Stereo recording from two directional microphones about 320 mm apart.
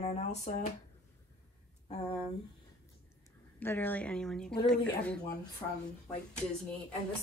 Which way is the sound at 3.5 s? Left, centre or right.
Centre.